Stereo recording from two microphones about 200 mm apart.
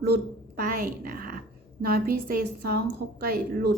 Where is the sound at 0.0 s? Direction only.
50° right (ahead or behind).